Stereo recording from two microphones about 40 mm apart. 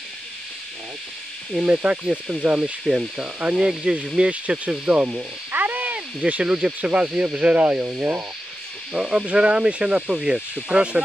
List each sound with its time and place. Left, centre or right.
1.5 s speech: right
3.9 s speech: centre
4.3 s speech: right
5.5 s a sound: right
5.9 s a sound: right
6.4 s speech: right
6.8 s speech: right
8.9 s speech: right